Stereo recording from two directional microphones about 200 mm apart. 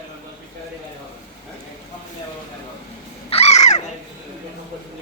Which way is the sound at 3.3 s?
30° left (ahead or behind).